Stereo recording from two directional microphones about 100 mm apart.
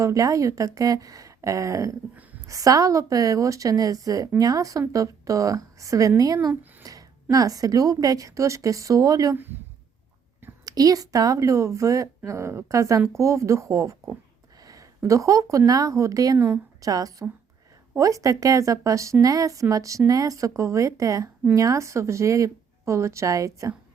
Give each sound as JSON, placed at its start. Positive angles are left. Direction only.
{"t": 0.0, "sound": "speech", "side_deg": -35}
{"t": 6.5, "sound": "a sound", "side_deg": -15}
{"t": 6.8, "sound": "speech", "side_deg": -35}
{"t": 9.3, "sound": "speech", "side_deg": -20}
{"t": 10.7, "sound": "speech", "side_deg": -40}